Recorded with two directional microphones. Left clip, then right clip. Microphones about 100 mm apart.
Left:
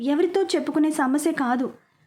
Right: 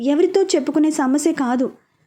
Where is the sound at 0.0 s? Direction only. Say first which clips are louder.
Right 5 dB; 25° right (ahead or behind).